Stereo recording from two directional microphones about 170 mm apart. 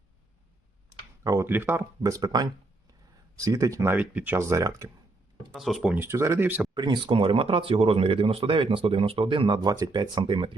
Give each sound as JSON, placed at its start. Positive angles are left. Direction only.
{"t": 1.2, "sound": "speech", "side_deg": -20}
{"t": 5.5, "sound": "speech", "side_deg": 0}
{"t": 6.7, "sound": "speech", "side_deg": -25}